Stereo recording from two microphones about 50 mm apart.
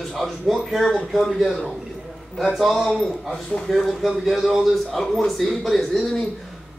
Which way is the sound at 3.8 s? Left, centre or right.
Centre.